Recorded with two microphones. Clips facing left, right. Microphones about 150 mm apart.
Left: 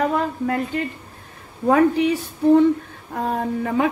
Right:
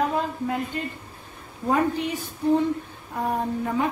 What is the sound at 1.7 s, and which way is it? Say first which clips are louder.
Speech: left 7 dB; 80° left.